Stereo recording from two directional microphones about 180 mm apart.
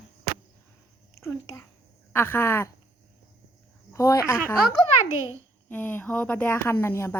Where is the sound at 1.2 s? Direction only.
15° left (ahead or behind).